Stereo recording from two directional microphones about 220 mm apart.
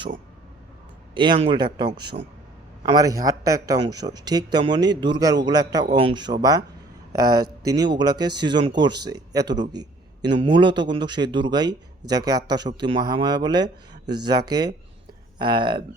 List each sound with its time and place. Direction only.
1.1 s speech: 20° right (ahead or behind)